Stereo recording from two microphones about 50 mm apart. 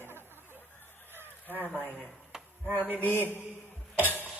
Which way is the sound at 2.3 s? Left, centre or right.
Centre.